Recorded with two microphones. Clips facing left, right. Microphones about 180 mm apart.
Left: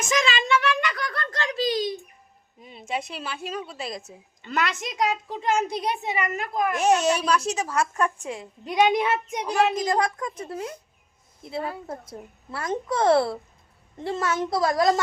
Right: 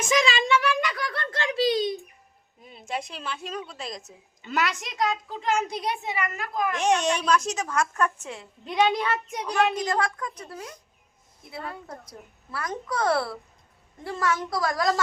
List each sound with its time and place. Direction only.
0.1 s a sound: 10° right (ahead or behind)
2.6 s a woman's voice: centre (ahead or behind)
5.5 s speech: 25° left (ahead or behind)
6.7 s a woman's voice: 5° left (ahead or behind)
9.5 s a woman's voice: 5° left (ahead or behind)
9.8 s speech: 20° left (ahead or behind)
11.9 s speech: 25° left (ahead or behind)